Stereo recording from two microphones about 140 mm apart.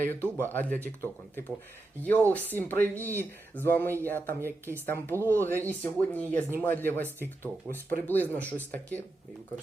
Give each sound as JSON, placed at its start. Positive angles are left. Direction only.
{"t": 0.0, "sound": "speech", "side_deg": 15}